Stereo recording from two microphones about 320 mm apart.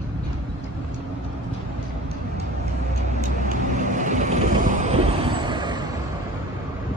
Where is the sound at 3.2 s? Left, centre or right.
Right.